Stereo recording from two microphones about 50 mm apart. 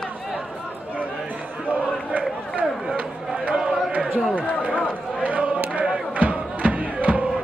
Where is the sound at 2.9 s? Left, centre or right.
Right.